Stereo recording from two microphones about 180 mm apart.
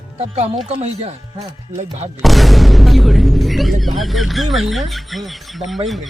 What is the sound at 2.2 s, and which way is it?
Speech, centre (ahead or behind).